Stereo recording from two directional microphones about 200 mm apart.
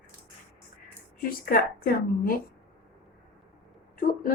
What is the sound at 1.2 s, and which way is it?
A woman's voice, 45° left (ahead or behind).